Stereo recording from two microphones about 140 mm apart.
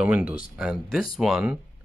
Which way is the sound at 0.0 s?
10° right (ahead or behind).